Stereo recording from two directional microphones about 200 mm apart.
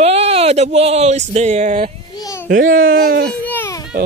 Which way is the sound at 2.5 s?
45° right (ahead or behind).